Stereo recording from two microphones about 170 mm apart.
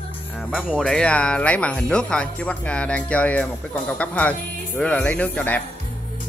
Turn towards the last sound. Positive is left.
turn(degrees=10)  # may be behind; listen again after turning